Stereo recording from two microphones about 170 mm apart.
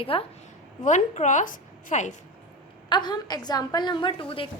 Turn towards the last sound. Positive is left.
turn(degrees=30)  # may be behind; listen again after turning